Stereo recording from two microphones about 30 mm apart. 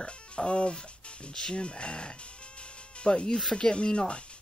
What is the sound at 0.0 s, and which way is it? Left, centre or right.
Speech, left.